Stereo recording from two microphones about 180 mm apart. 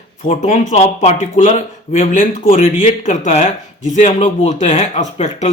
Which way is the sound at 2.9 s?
45° left (ahead or behind).